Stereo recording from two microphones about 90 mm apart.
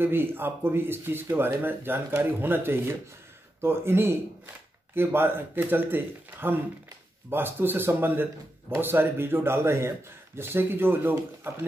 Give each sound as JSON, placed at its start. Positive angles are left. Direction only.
{"t": 0.0, "sound": "speech", "side_deg": -25}